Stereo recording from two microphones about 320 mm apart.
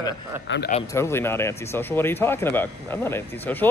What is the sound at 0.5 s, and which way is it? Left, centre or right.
Speech, left.